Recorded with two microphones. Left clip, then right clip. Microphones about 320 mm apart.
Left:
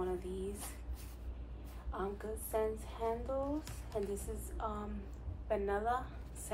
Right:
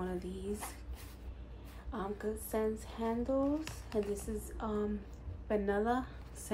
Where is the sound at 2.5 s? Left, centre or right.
Right.